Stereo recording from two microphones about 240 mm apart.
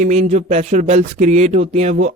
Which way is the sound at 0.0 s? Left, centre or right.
Right.